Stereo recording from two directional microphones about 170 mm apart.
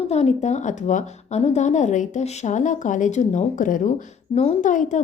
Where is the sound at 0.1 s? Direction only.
40° left (ahead or behind).